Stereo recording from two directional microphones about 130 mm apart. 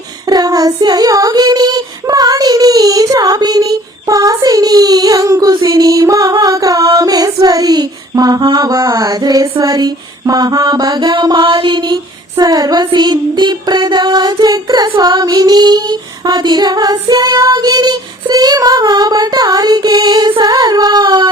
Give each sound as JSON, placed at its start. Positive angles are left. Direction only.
{"t": 0.3, "sound": "child singing", "side_deg": -30}
{"t": 5.6, "sound": "music", "side_deg": -25}
{"t": 7.4, "sound": "child singing", "side_deg": -30}